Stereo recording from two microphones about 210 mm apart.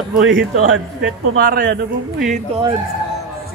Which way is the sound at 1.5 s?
45° right (ahead or behind).